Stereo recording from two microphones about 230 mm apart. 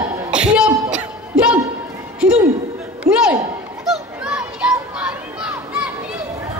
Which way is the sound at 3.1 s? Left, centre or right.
Right.